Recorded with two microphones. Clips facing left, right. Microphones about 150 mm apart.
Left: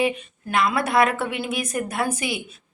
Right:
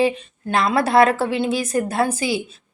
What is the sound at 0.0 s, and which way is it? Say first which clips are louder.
A woman's voice: right 4 dB; 30° right (ahead or behind).